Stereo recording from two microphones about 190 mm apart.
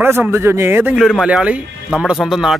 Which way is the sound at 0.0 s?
10° right (ahead or behind).